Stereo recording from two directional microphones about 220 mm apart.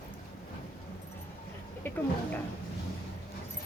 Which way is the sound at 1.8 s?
10° left (ahead or behind).